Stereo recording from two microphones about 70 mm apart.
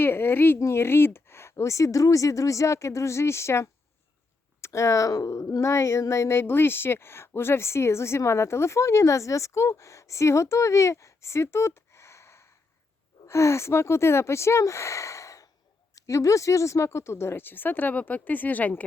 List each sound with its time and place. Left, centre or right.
0.0 s speech: left